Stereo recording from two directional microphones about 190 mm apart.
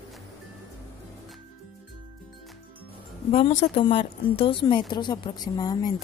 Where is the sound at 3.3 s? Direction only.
30° left (ahead or behind).